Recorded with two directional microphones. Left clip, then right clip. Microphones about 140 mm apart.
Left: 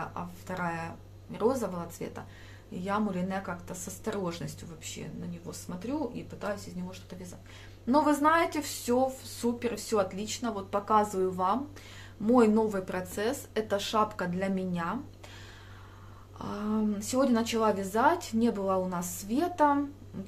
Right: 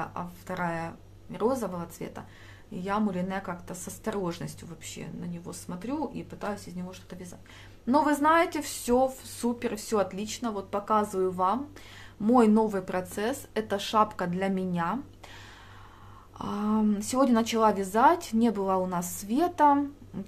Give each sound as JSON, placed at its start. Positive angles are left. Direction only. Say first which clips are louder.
{"t": 0.0, "sound": "speech", "louder": "right 2 dB", "side_deg": -35}
{"t": 12.3, "sound": "speech", "louder": "right 2 dB", "side_deg": -45}
{"t": 16.3, "sound": "speech", "louder": "right 4 dB", "side_deg": -50}
{"t": 20.1, "sound": "music", "louder": "right 2 dB", "side_deg": -50}